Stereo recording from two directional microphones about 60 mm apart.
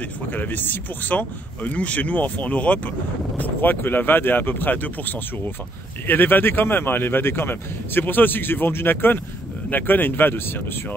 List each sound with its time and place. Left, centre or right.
0.3 s speech: left